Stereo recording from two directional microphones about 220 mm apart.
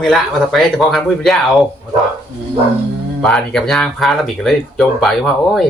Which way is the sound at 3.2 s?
Centre (ahead or behind).